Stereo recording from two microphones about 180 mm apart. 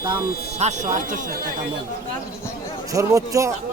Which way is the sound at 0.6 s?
40° right (ahead or behind).